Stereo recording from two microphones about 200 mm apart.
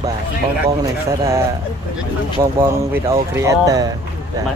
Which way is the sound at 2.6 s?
10° right (ahead or behind).